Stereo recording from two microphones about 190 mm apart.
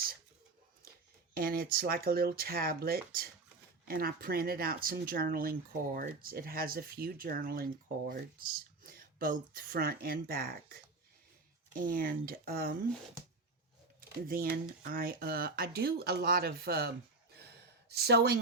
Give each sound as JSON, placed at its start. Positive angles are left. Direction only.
{"t": 0.8, "sound": "speech", "side_deg": -50}
{"t": 14.3, "sound": "speech", "side_deg": -50}